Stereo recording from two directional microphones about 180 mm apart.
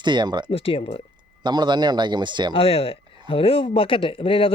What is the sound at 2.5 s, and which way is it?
Speech, 30° left (ahead or behind).